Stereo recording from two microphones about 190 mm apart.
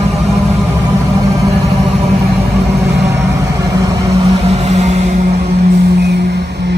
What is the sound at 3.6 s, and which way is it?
Vehicle, 20° right (ahead or behind).